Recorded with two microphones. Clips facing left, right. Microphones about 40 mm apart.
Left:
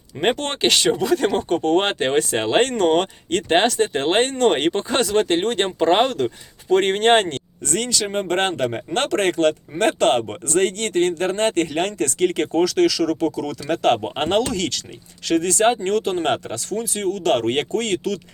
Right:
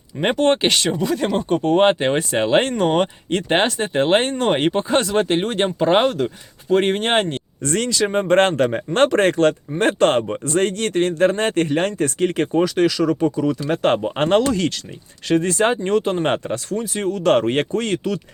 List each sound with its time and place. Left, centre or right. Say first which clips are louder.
0.2 s speech: right 4 dB; centre
0.7 s speech: left 2 dB; centre
7.6 s speech: right 3 dB; right
8.0 s speech: right 5 dB; right
8.4 s speech: right 5 dB; right